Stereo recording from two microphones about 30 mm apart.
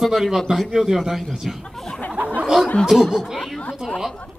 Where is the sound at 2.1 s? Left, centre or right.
Right.